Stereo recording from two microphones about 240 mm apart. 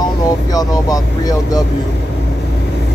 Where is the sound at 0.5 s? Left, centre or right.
Centre.